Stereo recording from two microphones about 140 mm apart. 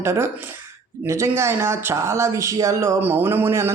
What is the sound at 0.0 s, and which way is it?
Speech, 20° right (ahead or behind).